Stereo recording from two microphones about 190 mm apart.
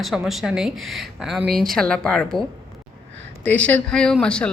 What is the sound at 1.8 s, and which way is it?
Speech, 5° left (ahead or behind).